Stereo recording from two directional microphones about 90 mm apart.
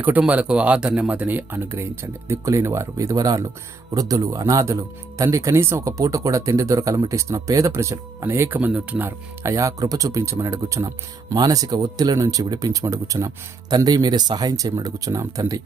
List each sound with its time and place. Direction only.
0.2 s speech: 15° right (ahead or behind); by 15.6 s 40° right (ahead or behind)